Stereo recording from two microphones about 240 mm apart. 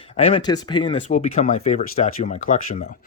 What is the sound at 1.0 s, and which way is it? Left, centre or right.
Speech, left.